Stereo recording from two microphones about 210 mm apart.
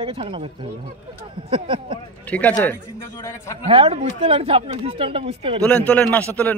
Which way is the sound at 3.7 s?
25° right (ahead or behind).